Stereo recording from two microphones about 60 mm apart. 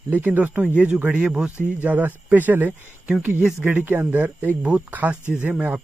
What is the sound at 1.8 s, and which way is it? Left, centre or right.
Speech, right.